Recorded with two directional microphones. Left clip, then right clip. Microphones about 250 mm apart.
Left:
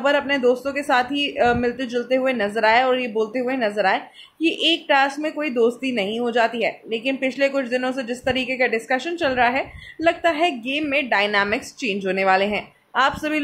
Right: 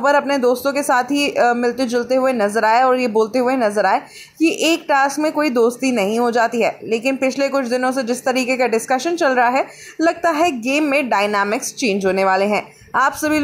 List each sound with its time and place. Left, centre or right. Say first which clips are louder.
0.0 s a woman's voice: right 4 dB; centre